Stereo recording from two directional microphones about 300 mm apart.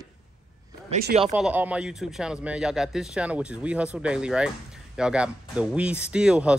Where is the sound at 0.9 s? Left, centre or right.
Right.